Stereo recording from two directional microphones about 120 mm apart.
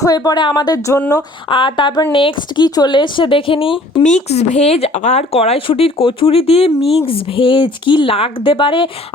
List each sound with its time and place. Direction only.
0.0 s speech: 30° left (ahead or behind)
1.5 s speech: 45° left (ahead or behind)
4.0 s speech: 75° left (ahead or behind); by 8.9 s 45° left (ahead or behind)